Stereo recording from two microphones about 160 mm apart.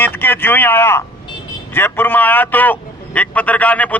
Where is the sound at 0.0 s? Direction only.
10° left (ahead or behind).